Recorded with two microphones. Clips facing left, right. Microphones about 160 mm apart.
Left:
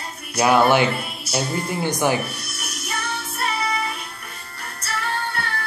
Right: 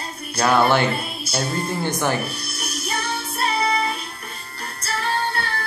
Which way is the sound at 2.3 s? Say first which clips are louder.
Right 3 dB; 30° right (ahead or behind).